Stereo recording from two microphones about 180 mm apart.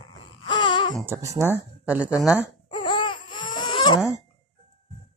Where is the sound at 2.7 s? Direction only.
25° left (ahead or behind).